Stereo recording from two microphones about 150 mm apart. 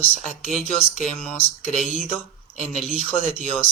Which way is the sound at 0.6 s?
5° left (ahead or behind).